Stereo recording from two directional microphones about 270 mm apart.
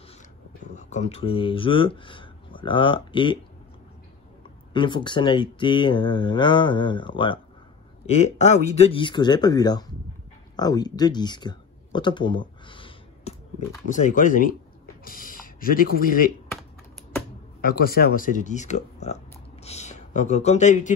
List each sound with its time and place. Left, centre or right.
0.7 s speech: left
4.7 s speech: centre
17.6 s speech: left